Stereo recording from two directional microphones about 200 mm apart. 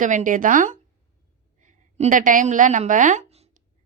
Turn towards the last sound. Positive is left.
turn(degrees=-35)  # may be behind; listen again after turning